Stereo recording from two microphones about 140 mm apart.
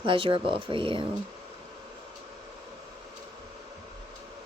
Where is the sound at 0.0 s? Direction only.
40° right (ahead or behind).